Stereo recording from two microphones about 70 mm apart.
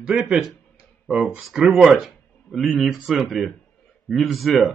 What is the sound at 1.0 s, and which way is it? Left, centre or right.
Speech, centre.